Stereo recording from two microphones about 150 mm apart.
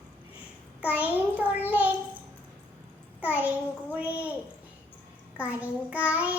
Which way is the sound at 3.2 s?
10° right (ahead or behind).